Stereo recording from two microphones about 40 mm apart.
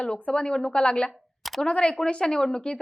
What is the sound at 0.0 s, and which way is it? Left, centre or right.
A woman's voice, left.